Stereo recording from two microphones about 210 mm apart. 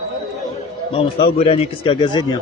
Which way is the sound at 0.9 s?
25° left (ahead or behind).